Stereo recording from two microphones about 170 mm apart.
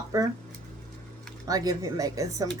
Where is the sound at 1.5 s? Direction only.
20° right (ahead or behind).